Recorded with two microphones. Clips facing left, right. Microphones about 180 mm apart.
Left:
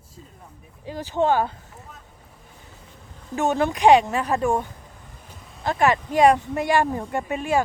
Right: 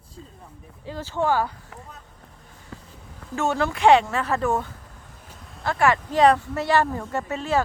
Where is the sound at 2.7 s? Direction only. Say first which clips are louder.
Right 8 dB; 90° right.